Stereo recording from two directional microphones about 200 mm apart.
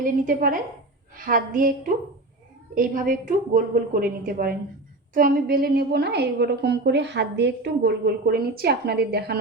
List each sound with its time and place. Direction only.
0.0 s a woman's voice: 45° right (ahead or behind)
2.7 s a woman's voice: 45° right (ahead or behind)